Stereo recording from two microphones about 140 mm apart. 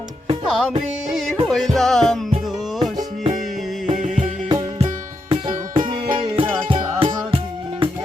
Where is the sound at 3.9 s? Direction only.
70° right (ahead or behind).